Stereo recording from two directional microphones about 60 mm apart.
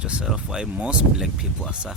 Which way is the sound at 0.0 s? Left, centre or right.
Centre.